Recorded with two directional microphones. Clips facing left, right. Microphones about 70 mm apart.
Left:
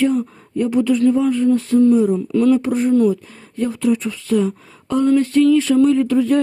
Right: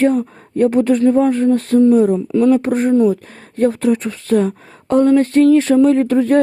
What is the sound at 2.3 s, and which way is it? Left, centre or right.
Speech, right.